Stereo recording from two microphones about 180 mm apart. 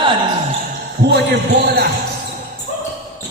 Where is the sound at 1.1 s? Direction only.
70° right (ahead or behind).